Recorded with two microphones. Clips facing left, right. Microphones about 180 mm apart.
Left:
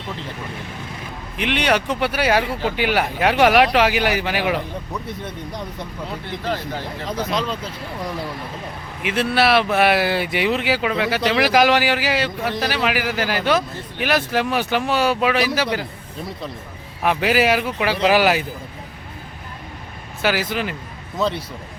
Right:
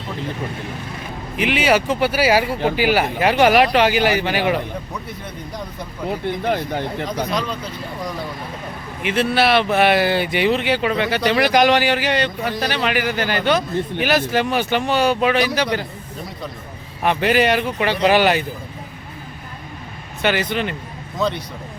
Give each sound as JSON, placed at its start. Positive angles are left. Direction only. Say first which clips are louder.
{"t": 1.4, "sound": "speech", "louder": "right 3 dB", "side_deg": -5}
{"t": 6.1, "sound": "speech", "louder": "right 6 dB", "side_deg": -55}
{"t": 9.0, "sound": "speech", "louder": "right 1 dB", "side_deg": 0}
{"t": 17.0, "sound": "speech", "louder": "right 1 dB", "side_deg": 0}
{"t": 20.2, "sound": "speech", "louder": "right 1 dB", "side_deg": 5}